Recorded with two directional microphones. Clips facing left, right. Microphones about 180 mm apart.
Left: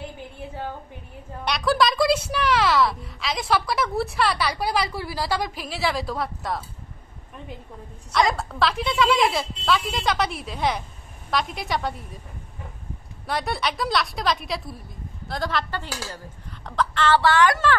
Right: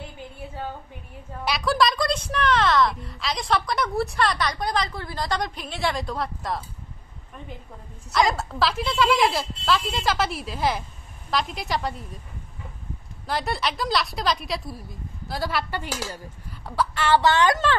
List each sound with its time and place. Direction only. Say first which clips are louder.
1.4 s speech: left 1 dB; centre (ahead or behind)
8.1 s speech: even; centre (ahead or behind)
13.3 s speech: even; centre (ahead or behind); by 17.7 s 20° right (ahead or behind)